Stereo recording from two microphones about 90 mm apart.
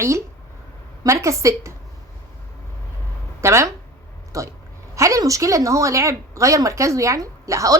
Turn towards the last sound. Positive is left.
turn(degrees=-35)  # may be behind; listen again after turning